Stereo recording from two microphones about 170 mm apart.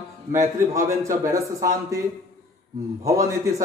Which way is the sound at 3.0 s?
20° right (ahead or behind).